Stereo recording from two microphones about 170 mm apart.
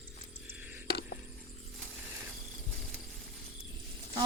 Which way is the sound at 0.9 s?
70° left (ahead or behind).